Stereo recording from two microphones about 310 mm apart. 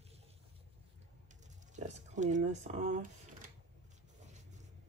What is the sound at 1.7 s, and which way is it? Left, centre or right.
Speech, right.